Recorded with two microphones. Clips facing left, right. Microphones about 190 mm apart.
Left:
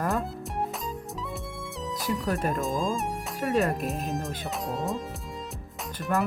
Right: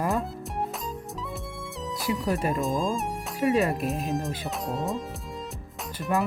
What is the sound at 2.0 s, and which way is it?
Speech, centre (ahead or behind).